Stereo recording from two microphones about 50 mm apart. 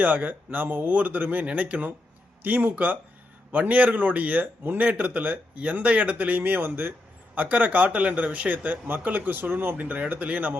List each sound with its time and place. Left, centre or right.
0.0 s speech: right